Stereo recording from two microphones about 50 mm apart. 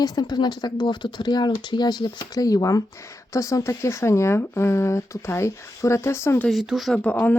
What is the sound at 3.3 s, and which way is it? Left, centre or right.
Speech, left.